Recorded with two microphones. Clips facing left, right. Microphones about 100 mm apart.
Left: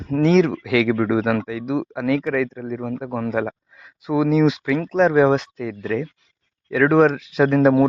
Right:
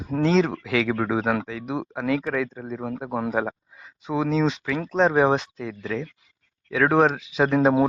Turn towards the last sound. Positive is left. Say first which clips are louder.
# left 4 dB
turn(degrees=-5)  # may be behind; listen again after turning